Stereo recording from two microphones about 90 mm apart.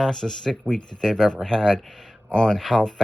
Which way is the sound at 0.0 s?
5° left (ahead or behind).